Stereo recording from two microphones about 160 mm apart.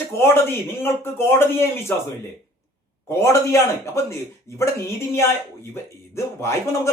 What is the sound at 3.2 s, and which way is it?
A man's voice, 20° left (ahead or behind).